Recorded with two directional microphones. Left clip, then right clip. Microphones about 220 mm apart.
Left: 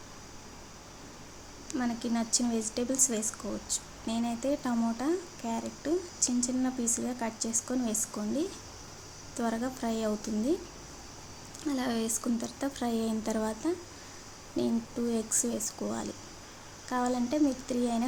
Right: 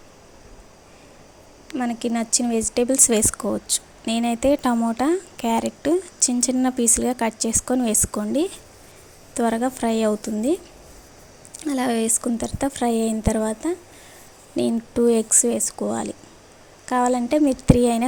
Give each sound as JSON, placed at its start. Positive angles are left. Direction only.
{"t": 1.7, "sound": "speech", "side_deg": -30}
{"t": 11.6, "sound": "speech", "side_deg": -35}